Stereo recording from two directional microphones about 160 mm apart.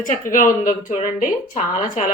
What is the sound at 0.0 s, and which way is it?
Speech, 55° left (ahead or behind).